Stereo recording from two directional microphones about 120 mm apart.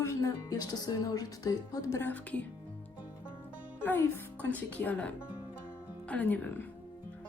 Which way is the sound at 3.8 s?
15° left (ahead or behind).